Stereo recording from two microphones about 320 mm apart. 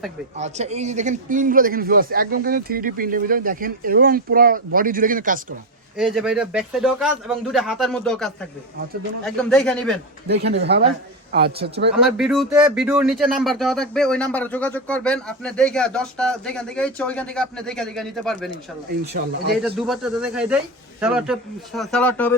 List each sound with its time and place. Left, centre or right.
0.3 s speech: right
6.0 s speech: centre
10.2 s speech: right
12.0 s speech: centre
19.1 s speech: right
19.6 s speech: centre